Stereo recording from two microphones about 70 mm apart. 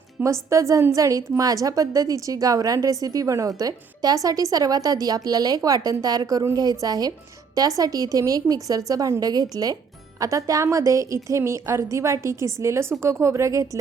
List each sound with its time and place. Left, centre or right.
0.2 s a woman's voice: right
10.2 s a woman's voice: right